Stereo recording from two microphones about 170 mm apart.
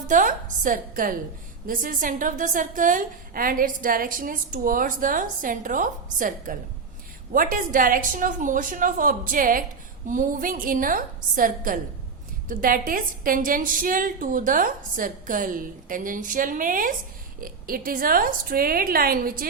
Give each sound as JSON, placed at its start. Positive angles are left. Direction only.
{"t": 0.1, "sound": "a woman's voice", "side_deg": -50}